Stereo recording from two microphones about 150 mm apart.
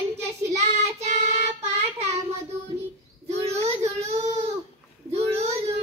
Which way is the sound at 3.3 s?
45° right (ahead or behind).